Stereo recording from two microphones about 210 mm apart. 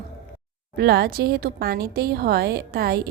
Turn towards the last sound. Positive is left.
turn(degrees=-50)  # may be behind; listen again after turning